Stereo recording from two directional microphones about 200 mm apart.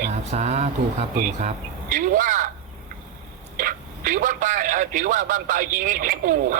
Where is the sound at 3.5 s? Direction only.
40° right (ahead or behind).